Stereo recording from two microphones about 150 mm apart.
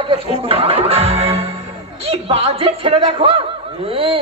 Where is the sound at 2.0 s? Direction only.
40° right (ahead or behind).